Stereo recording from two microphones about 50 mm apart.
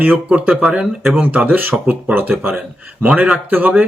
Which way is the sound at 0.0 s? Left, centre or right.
Right.